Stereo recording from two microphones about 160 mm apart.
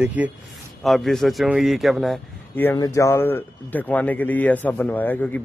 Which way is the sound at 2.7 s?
20° left (ahead or behind).